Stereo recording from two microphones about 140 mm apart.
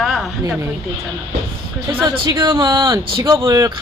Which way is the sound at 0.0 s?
Centre (ahead or behind).